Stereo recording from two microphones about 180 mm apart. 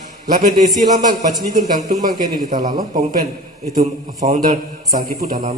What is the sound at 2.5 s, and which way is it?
A man's voice, 40° right (ahead or behind).